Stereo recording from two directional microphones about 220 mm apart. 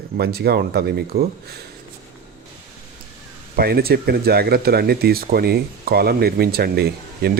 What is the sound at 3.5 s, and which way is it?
Speech, 45° right (ahead or behind).